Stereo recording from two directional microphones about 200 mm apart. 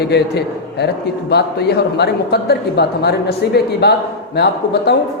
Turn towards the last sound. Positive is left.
turn(degrees=55)  # may be behind; listen again after turning